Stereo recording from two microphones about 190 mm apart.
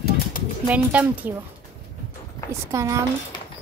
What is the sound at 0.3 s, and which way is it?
Pigeon, 45° left (ahead or behind).